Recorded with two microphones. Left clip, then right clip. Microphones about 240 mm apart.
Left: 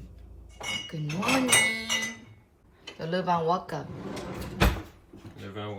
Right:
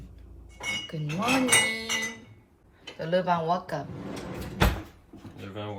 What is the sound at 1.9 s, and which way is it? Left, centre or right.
Chink, left.